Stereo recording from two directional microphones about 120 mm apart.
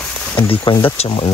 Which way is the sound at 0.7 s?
50° left (ahead or behind).